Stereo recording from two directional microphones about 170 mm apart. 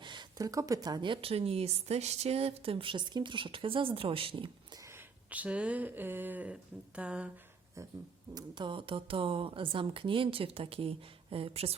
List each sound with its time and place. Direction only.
0.0 s speech: 25° right (ahead or behind)
4.8 s speech: 15° right (ahead or behind)
7.8 s speech: 20° right (ahead or behind); by 11.7 s 35° right (ahead or behind)